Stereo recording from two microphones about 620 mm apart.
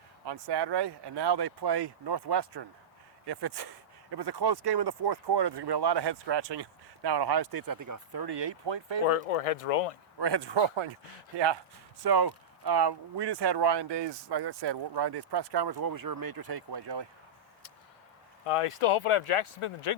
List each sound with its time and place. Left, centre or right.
0.3 s speech: right
4.1 s speech: right
9.0 s speech: left
10.2 s speech: right
12.0 s speech: right
18.4 s speech: left